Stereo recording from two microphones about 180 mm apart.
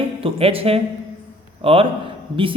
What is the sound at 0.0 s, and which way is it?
A woman's voice, 30° right (ahead or behind).